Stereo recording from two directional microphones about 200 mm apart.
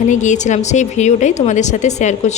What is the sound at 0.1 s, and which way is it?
A woman's voice, 35° left (ahead or behind).